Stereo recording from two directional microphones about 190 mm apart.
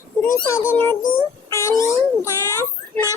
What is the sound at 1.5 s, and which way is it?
Cat, 15° left (ahead or behind).